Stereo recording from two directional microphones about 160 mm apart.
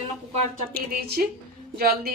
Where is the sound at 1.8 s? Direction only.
75° right (ahead or behind).